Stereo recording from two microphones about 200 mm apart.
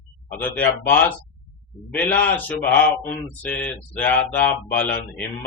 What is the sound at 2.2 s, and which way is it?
Speech, 10° left (ahead or behind).